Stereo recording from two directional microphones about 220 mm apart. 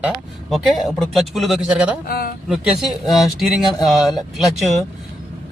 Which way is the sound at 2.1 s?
45° left (ahead or behind).